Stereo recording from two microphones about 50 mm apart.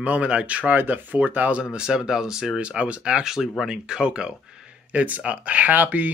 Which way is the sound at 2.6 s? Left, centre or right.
Right.